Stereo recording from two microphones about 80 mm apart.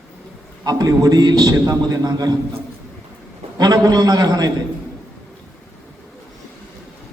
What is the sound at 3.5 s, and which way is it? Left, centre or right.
Speech, right.